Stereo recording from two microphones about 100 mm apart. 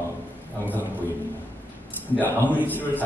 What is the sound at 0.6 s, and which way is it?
Speech, 15° left (ahead or behind).